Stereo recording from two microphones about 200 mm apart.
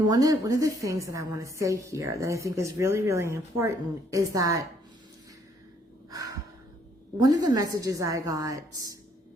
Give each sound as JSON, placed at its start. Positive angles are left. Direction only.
{"t": 0.1, "sound": "a woman's voice", "side_deg": -15}
{"t": 6.1, "sound": "gasp", "side_deg": -15}
{"t": 7.2, "sound": "a woman's voice", "side_deg": -20}